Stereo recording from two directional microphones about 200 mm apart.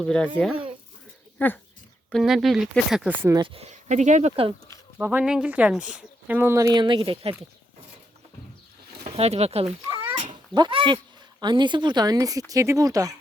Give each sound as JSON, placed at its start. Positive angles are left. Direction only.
{"t": 0.0, "sound": "speech", "side_deg": 5}
{"t": 1.4, "sound": "speech", "side_deg": 10}
{"t": 3.4, "sound": "speech", "side_deg": -30}
{"t": 4.9, "sound": "speech", "side_deg": -10}
{"t": 9.0, "sound": "speech", "side_deg": -30}